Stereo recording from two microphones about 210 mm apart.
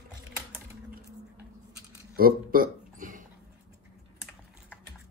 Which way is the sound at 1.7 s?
45° right (ahead or behind).